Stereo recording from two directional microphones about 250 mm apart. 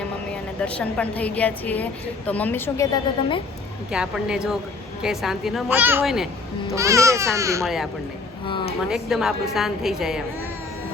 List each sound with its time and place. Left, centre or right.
0.6 s a woman's voice: centre
3.9 s a woman's voice: centre
7.6 s a woman's voice: centre
8.4 s speech: centre
8.9 s a woman's voice: centre